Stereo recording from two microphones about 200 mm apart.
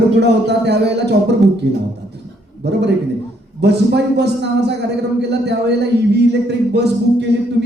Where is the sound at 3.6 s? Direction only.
55° right (ahead or behind).